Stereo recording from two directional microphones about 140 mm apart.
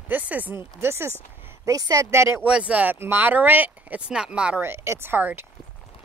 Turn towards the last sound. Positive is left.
turn(degrees=-15)  # may be behind; listen again after turning